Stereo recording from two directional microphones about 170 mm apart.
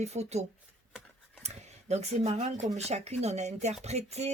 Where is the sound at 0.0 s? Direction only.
40° right (ahead or behind).